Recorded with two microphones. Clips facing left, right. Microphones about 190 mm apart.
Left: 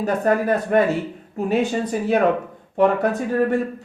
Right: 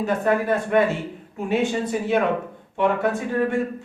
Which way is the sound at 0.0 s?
40° left (ahead or behind).